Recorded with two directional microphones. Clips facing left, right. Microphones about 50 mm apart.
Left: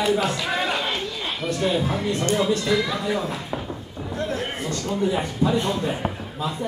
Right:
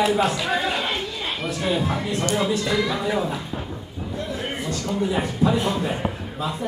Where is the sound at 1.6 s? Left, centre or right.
Centre.